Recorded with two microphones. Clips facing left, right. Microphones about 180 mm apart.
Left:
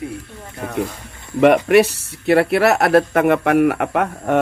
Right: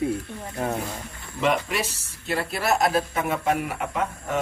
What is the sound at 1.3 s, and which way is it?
Speech, 65° left (ahead or behind).